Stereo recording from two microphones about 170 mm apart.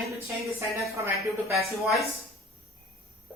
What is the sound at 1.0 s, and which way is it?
Speech, 15° right (ahead or behind).